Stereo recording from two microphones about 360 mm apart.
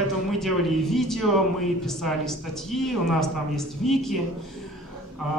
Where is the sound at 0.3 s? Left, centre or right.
Centre.